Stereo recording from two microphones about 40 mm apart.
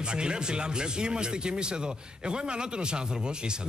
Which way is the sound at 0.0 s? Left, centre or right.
Right.